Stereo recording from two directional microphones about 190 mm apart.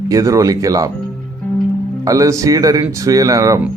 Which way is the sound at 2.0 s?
15° right (ahead or behind).